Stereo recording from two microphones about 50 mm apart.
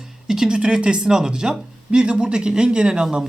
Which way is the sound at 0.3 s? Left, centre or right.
Centre.